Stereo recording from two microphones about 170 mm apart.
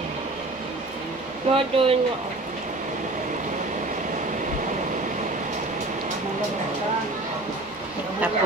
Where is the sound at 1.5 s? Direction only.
30° right (ahead or behind).